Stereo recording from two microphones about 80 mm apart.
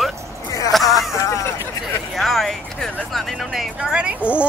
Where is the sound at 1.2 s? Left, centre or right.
Left.